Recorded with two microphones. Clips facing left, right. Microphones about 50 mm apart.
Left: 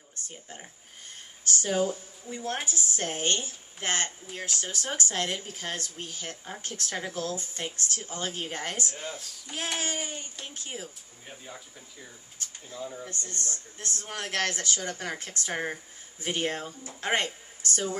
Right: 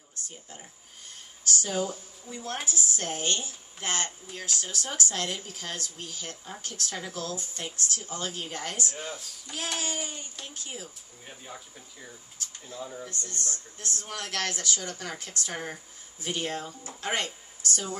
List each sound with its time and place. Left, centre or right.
0.1 s a woman's voice: left
13.1 s a woman's voice: left